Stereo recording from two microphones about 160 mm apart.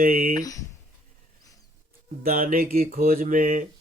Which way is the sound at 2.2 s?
60° right (ahead or behind).